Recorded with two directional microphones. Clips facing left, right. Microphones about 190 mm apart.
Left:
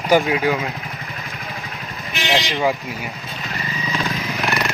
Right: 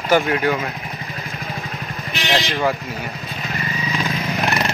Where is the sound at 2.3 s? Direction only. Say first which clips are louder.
Even; 15° left (ahead or behind).